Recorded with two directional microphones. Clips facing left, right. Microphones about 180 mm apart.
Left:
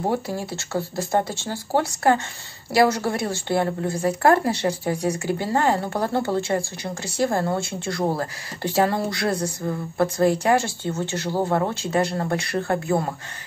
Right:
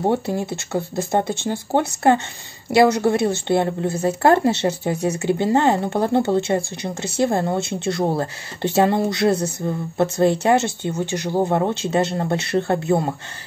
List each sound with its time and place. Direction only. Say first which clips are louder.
0.0 s a woman's voice: right 4 dB; 25° right (ahead or behind)